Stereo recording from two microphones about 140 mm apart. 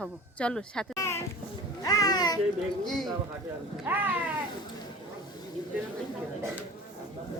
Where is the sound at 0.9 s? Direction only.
20° left (ahead or behind).